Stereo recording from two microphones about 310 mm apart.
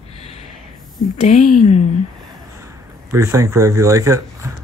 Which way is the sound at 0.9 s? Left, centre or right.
Left.